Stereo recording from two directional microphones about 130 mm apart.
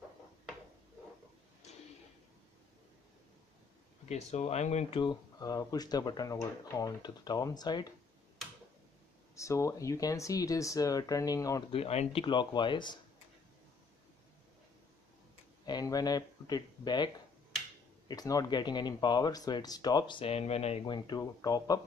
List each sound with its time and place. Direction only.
4.1 s speech: 60° left (ahead or behind)
4.9 s speech: 30° left (ahead or behind)
9.3 s speech: 25° left (ahead or behind)
11.7 s speech: 50° left (ahead or behind); by 13.0 s 35° left (ahead or behind)
15.6 s speech: 30° left (ahead or behind); by 20.8 s 55° left (ahead or behind)
20.8 s speech: 35° left (ahead or behind)